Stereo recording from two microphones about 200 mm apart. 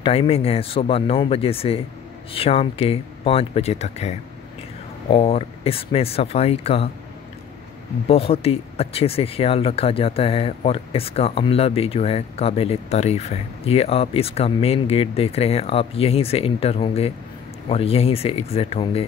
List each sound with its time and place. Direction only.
0.0 s speech: 30° left (ahead or behind)
8.1 s speech: 30° left (ahead or behind)